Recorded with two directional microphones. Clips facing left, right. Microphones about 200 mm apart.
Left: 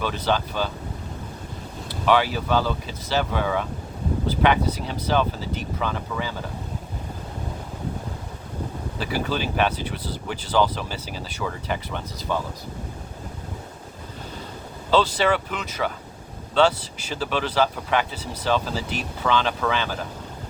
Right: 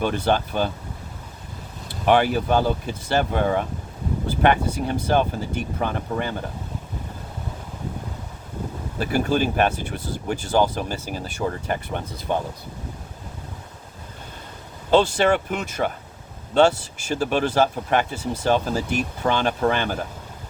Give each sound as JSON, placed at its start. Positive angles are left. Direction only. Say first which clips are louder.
{"t": 0.0, "sound": "speech", "louder": "right 3 dB", "side_deg": -50}
{"t": 1.9, "sound": "speech", "louder": "right 2 dB", "side_deg": -55}
{"t": 9.0, "sound": "speech", "louder": "right 5 dB", "side_deg": -50}
{"t": 12.3, "sound": "speech", "louder": "right 2 dB", "side_deg": -20}
{"t": 14.8, "sound": "speech", "louder": "right 3 dB", "side_deg": -50}